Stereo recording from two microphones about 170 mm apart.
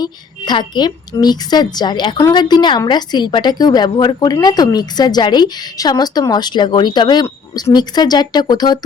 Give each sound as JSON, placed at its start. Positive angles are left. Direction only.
{"t": 0.0, "sound": "a woman's voice", "side_deg": 25}